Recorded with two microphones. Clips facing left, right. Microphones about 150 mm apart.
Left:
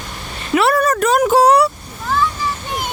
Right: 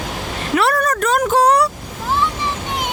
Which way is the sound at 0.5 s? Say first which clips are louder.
Left 3 dB; 5° left (ahead or behind).